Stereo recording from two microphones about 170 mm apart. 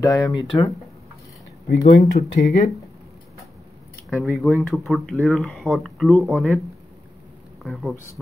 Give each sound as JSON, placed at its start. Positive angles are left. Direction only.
{"t": 0.0, "sound": "speech", "side_deg": 20}
{"t": 1.8, "sound": "speech", "side_deg": 45}
{"t": 4.1, "sound": "speech", "side_deg": 0}
{"t": 7.6, "sound": "speech", "side_deg": 0}